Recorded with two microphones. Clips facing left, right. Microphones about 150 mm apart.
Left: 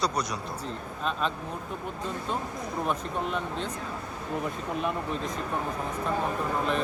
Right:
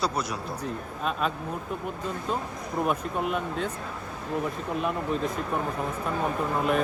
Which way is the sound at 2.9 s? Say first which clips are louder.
Right 2 dB; 5° right (ahead or behind).